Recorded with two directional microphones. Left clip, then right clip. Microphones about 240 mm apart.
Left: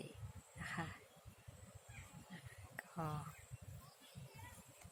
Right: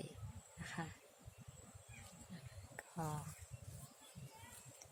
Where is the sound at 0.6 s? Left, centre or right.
Centre.